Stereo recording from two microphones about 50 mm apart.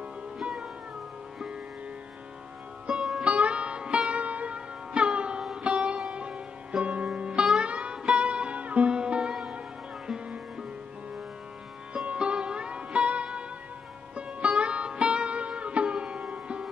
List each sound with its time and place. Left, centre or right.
0.4 s music: centre
2.9 s sitar: centre
3.3 s music: right
6.1 s sitar: right
7.2 s music: centre
12.1 s music: centre